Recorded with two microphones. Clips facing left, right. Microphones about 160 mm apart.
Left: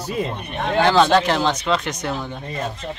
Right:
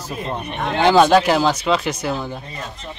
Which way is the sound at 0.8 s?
15° right (ahead or behind).